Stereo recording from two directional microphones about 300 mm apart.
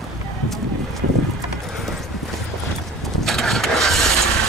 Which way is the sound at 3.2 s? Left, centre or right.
Centre.